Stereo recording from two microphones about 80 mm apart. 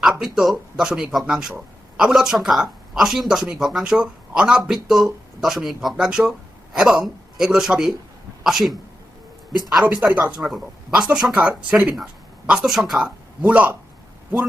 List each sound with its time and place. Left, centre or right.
0.0 s speech: centre
9.8 s speech: centre
12.6 s speech: centre
13.4 s speech: right